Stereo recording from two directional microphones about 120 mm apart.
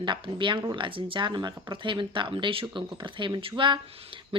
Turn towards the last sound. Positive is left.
turn(degrees=-50)  # may be behind; listen again after turning